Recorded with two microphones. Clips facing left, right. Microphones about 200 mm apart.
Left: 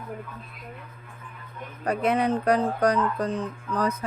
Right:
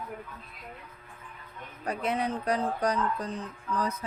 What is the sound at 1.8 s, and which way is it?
Speech, 70° left (ahead or behind).